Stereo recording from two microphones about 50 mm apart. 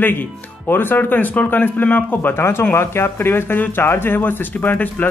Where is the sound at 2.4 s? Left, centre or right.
Left.